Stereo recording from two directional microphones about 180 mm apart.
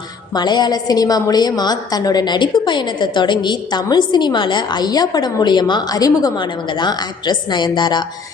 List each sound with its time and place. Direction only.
0.3 s a woman's voice: 25° left (ahead or behind)